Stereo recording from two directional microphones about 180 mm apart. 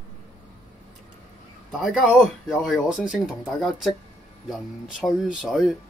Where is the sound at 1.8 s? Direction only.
Centre (ahead or behind).